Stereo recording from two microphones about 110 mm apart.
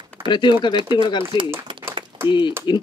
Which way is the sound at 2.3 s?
45° left (ahead or behind).